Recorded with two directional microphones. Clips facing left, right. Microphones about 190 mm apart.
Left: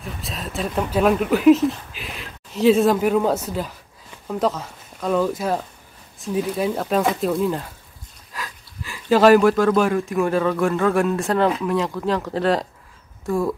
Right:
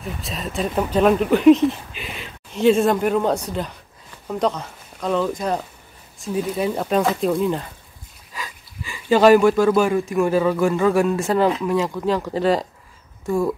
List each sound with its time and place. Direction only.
0.0 s speech: centre (ahead or behind)